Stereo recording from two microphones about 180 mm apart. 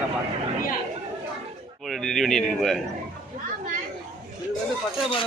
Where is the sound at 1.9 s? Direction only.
Centre (ahead or behind).